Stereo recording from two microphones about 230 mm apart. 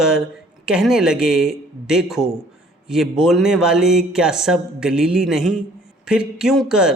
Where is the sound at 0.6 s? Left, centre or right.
Centre.